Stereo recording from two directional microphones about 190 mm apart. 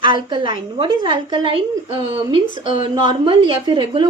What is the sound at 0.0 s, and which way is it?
Speech, 25° right (ahead or behind).